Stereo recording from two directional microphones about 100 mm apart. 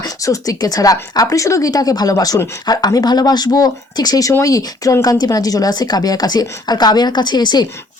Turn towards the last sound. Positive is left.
turn(degrees=45)  # may be behind; listen again after turning